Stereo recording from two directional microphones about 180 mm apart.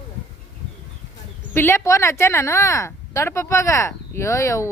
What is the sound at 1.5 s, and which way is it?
Speech, 15° left (ahead or behind).